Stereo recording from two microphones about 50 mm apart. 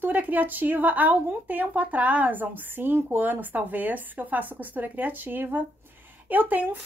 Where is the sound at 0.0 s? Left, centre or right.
Right.